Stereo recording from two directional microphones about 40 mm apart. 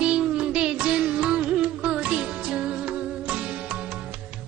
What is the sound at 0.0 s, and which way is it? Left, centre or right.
Music, right.